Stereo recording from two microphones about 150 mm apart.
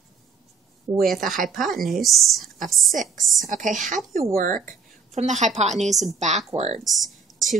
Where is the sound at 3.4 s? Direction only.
60° right (ahead or behind).